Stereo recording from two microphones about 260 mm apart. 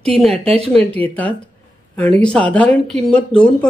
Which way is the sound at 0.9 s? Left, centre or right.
Centre.